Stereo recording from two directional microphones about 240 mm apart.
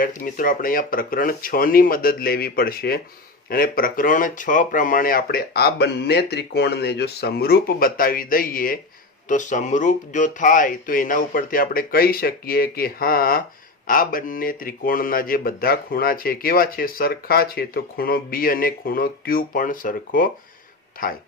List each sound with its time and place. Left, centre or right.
0.0 s speech: left